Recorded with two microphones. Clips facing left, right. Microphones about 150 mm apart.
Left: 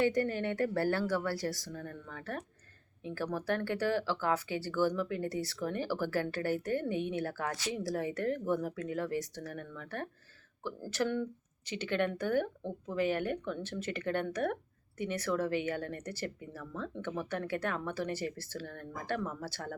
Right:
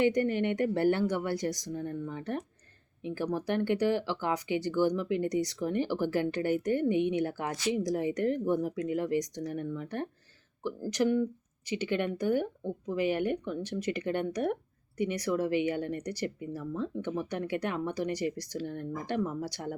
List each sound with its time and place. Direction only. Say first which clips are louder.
0.0 s speech: right 4 dB; 20° right (ahead or behind)